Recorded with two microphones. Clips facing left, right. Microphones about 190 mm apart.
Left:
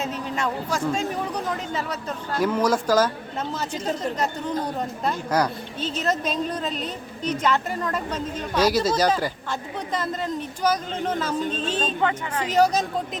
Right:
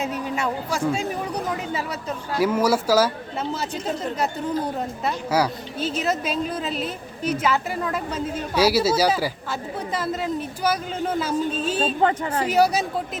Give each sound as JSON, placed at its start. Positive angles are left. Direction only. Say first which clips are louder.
{"t": 0.0, "sound": "a sound", "louder": "right 1 dB", "side_deg": -10}
{"t": 1.5, "sound": "speech", "louder": "right 1 dB", "side_deg": -10}
{"t": 12.0, "sound": "speech", "louder": "right 3 dB", "side_deg": -35}
{"t": 12.5, "sound": "speech", "louder": "even", "side_deg": -10}